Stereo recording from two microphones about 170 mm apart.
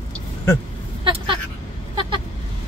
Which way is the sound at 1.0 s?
30° right (ahead or behind).